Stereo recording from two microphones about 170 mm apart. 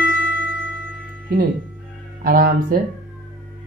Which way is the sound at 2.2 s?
55° right (ahead or behind).